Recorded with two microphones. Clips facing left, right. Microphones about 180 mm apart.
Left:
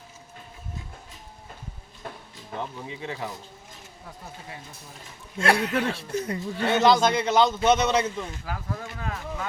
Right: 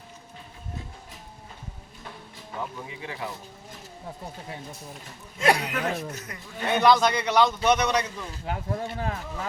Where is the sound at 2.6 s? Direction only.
30° left (ahead or behind).